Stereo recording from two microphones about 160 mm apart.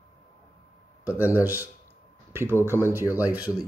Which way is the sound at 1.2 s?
10° right (ahead or behind).